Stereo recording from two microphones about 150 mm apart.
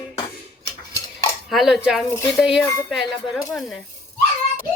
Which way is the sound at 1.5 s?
Centre (ahead or behind).